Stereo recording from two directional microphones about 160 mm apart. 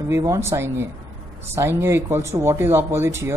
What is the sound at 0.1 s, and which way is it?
Speech, 20° right (ahead or behind).